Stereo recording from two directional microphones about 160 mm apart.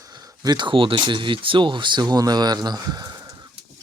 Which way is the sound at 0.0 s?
20° right (ahead or behind).